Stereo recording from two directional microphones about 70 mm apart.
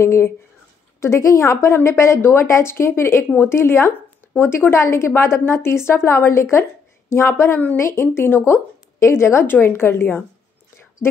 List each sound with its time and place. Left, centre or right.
0.0 s a woman's voice: left